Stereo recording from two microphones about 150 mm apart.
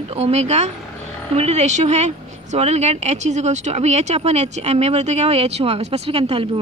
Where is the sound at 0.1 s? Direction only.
45° right (ahead or behind).